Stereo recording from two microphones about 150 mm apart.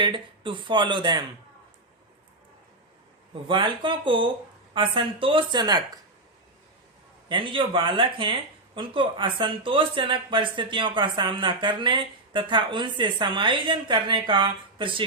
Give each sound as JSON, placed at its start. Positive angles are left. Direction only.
{"t": 0.0, "sound": "speech", "side_deg": -30}
{"t": 3.5, "sound": "speech", "side_deg": -35}
{"t": 7.3, "sound": "speech", "side_deg": -35}